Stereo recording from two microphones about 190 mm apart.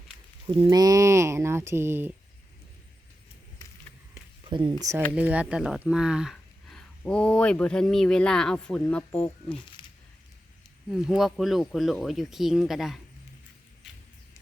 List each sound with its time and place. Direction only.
0.4 s speech: 25° right (ahead or behind); by 2.1 s 10° right (ahead or behind)
4.4 s speech: 25° right (ahead or behind); by 9.6 s 5° left (ahead or behind)
9.8 s a sound: 25° left (ahead or behind)
10.9 s speech: centre (ahead or behind)